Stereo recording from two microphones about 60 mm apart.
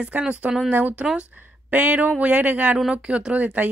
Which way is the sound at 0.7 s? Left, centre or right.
Right.